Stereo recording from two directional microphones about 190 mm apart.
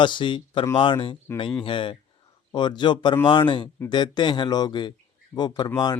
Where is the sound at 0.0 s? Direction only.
25° left (ahead or behind).